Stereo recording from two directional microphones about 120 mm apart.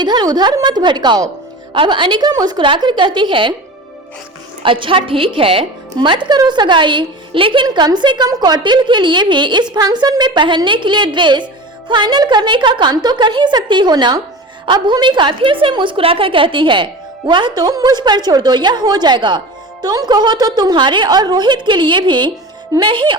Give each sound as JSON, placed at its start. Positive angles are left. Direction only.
{"t": 0.0, "sound": "a woman's voice", "side_deg": -35}
{"t": 4.6, "sound": "a woman's voice", "side_deg": -45}